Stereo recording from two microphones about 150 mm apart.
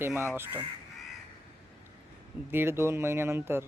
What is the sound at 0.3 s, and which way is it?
Speech, 15° right (ahead or behind).